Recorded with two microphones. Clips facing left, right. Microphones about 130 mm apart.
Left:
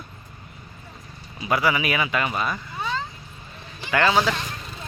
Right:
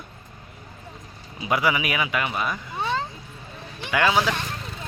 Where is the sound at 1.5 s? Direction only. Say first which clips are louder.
Left 1 dB; 15° right (ahead or behind).